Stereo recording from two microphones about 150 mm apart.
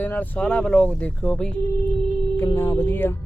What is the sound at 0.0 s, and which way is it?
Speech, 10° left (ahead or behind).